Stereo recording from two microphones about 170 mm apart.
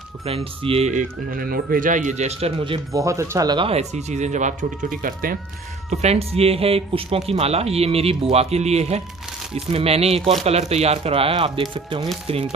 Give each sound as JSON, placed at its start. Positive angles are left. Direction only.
{"t": 0.3, "sound": "speech", "side_deg": -35}
{"t": 2.9, "sound": "speech", "side_deg": -20}
{"t": 5.9, "sound": "speech", "side_deg": -40}